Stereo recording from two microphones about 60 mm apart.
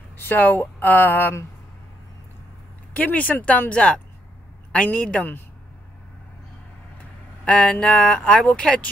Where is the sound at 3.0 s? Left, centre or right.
Left.